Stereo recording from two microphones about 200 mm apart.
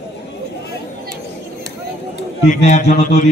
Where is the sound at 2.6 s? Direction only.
35° left (ahead or behind).